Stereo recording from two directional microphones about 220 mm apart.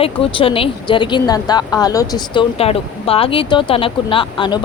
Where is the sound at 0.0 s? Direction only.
25° left (ahead or behind).